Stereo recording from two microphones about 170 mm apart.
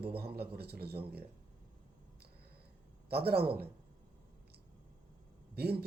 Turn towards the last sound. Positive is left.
turn(degrees=-70)  # may be behind; listen again after turning